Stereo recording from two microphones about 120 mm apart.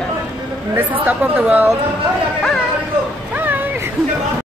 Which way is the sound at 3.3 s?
15° right (ahead or behind).